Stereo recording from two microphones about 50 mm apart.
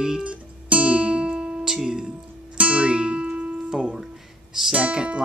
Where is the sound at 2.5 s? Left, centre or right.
Right.